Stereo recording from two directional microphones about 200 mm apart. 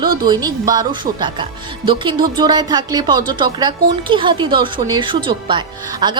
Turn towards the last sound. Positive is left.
turn(degrees=-25)  # may be behind; listen again after turning